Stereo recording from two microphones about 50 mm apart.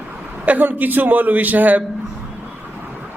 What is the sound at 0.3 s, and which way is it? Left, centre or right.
A man's voice, right.